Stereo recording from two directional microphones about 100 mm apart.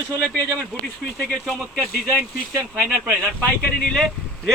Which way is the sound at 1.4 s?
5° left (ahead or behind).